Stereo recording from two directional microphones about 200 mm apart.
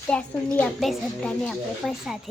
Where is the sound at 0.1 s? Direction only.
5° left (ahead or behind).